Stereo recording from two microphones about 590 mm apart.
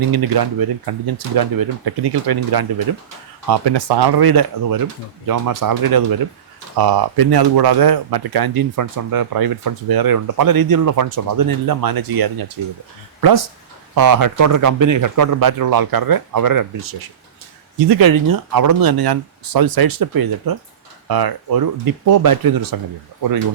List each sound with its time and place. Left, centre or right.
0.1 s speech: right